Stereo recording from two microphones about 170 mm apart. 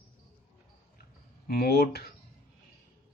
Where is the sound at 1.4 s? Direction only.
65° left (ahead or behind).